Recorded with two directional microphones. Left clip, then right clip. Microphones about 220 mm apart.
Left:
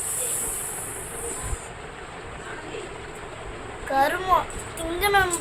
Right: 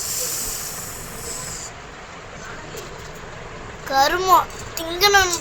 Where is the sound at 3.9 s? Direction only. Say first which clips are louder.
Right 5 dB; 25° right (ahead or behind).